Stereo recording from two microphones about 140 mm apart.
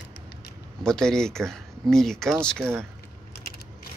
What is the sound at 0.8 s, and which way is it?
Speech, 5° left (ahead or behind).